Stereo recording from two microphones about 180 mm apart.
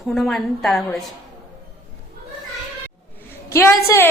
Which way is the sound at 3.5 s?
15° left (ahead or behind).